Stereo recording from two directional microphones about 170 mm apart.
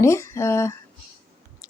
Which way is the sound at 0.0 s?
15° left (ahead or behind).